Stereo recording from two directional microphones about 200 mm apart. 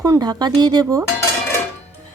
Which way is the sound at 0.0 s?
20° right (ahead or behind).